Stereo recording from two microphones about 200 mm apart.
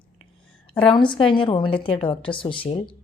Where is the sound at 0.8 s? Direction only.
25° left (ahead or behind).